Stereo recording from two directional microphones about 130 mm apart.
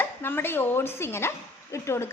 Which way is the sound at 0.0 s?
15° left (ahead or behind).